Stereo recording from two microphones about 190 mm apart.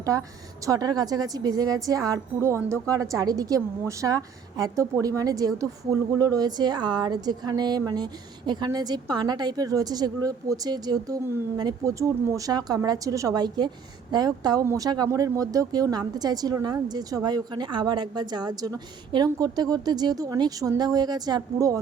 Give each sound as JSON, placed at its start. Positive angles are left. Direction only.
{"t": 0.0, "sound": "a woman's voice", "side_deg": -15}